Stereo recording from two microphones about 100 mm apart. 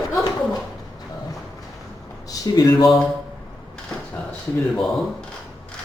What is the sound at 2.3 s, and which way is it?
Speech, 40° left (ahead or behind).